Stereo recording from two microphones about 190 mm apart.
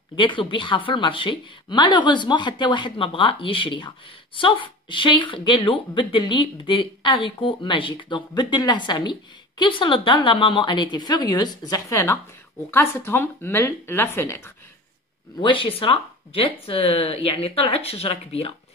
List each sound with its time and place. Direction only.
0.1 s speech: 25° left (ahead or behind)
15.3 s speech: 25° left (ahead or behind)